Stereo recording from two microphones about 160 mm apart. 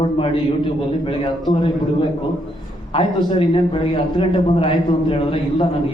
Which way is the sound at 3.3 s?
30° left (ahead or behind).